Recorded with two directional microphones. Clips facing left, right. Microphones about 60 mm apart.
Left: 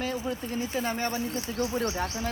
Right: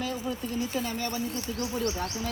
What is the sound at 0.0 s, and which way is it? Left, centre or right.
Speech, left.